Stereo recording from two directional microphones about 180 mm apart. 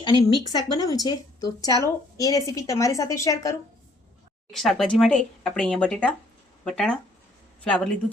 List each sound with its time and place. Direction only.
0.0 s a woman's voice: 25° left (ahead or behind)
4.5 s speech: centre (ahead or behind)